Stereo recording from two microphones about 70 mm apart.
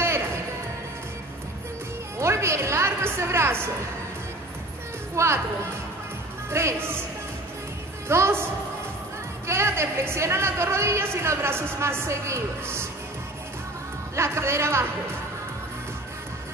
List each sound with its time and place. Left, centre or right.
2.1 s music: right
5.1 s speech: right
6.5 s a woman's voice: right
8.1 s a woman's voice: right
9.5 s a woman's voice: right
14.1 s a woman's voice: right